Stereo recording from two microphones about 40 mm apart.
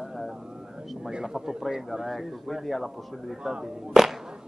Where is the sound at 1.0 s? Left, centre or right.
Centre.